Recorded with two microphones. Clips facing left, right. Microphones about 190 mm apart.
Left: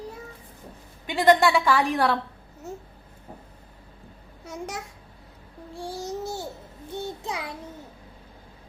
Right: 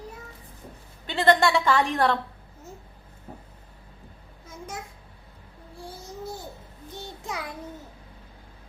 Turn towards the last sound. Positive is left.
turn(degrees=20)  # may be behind; listen again after turning